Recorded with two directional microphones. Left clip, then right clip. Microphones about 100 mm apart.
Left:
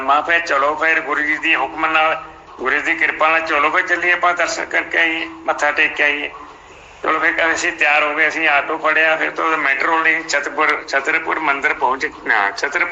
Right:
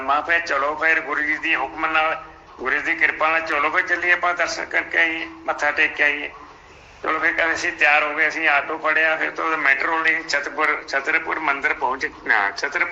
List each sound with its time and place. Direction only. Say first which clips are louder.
0.0 s a man's voice: left 5 dB; 30° left (ahead or behind)